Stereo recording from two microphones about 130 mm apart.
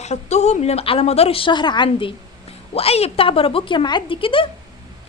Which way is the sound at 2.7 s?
50° left (ahead or behind).